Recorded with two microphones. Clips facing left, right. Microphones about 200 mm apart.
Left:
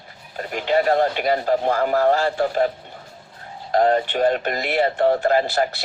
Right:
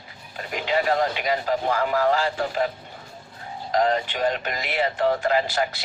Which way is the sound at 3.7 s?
40° left (ahead or behind).